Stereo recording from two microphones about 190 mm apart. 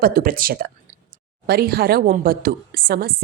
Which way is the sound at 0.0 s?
50° right (ahead or behind).